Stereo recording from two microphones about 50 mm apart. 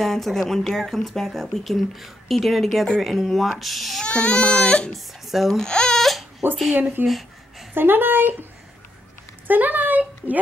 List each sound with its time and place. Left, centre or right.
0.0 s speech: centre
4.0 s speech: centre
4.9 s speech: centre
5.5 s speech: centre
6.7 s speech: right
9.5 s speech: right